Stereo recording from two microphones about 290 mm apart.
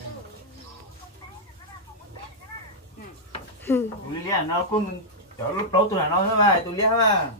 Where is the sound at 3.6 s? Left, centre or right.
Centre.